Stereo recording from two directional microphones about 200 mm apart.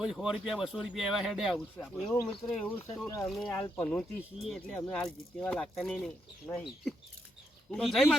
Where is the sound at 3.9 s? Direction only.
5° left (ahead or behind).